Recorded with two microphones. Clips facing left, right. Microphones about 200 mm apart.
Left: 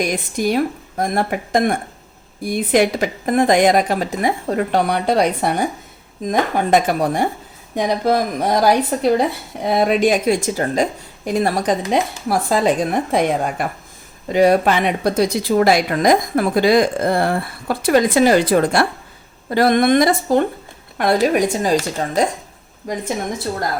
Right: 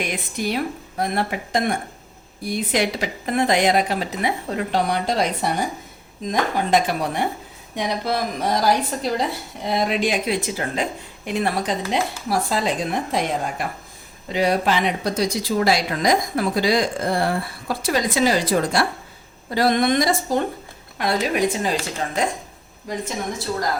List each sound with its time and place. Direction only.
0.0 s a woman's voice: 45° left (ahead or behind)
21.0 s a woman's voice: 50° left (ahead or behind)